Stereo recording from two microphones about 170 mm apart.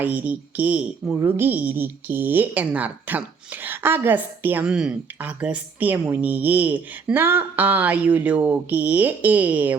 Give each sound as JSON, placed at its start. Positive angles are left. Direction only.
{"t": 0.0, "sound": "a woman's voice", "side_deg": -10}